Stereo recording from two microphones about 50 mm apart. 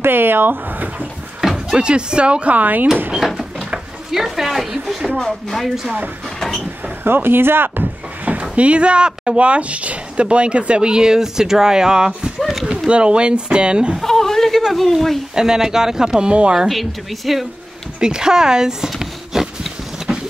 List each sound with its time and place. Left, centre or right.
0.0 s speech: right
1.4 s a sound: centre
1.8 s speech: centre; by 2.9 s right
3.2 s a sound: centre
5.2 s speech: centre
7.1 s speech: right
8.3 s speech: right
14.0 s a sound: centre
14.6 s a woman's voice: centre
15.3 s speech: centre
16.5 s a woman's voice: centre
18.0 s speech: centre
18.9 s a sound: centre